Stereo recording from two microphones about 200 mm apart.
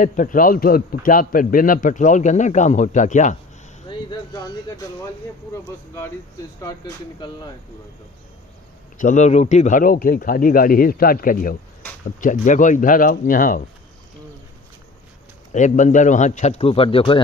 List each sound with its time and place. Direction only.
0.0 s a man's voice: 40° left (ahead or behind)
4.1 s speech: 20° left (ahead or behind)
5.5 s speech: 10° left (ahead or behind)
8.9 s a man's voice: 40° left (ahead or behind)
15.5 s a man's voice: 40° left (ahead or behind)